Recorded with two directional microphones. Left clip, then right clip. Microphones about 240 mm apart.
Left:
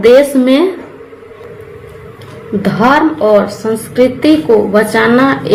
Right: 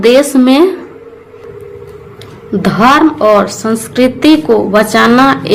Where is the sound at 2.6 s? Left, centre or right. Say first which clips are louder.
Right 2 dB; right.